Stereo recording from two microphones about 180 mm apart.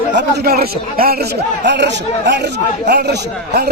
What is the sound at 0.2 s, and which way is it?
A man's voice, 60° right (ahead or behind).